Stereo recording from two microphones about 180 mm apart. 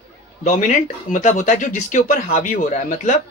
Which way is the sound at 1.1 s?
45° left (ahead or behind).